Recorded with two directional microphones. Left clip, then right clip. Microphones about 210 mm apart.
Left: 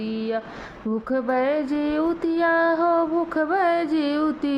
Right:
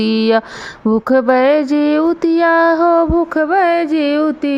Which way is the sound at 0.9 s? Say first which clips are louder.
Right 12 dB; 35° right (ahead or behind).